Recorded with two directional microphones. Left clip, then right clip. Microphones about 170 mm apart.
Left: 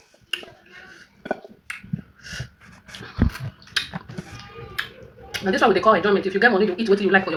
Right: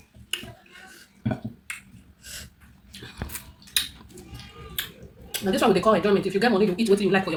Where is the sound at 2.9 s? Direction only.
20° right (ahead or behind).